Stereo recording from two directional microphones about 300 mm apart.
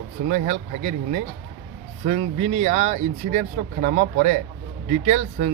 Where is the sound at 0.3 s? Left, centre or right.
Right.